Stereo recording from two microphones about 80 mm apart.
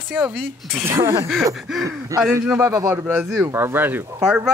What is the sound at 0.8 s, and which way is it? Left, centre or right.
Speech, right.